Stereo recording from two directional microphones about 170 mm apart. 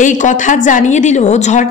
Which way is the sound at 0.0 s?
45° left (ahead or behind).